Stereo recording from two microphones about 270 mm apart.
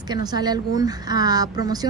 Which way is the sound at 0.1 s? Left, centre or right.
Centre.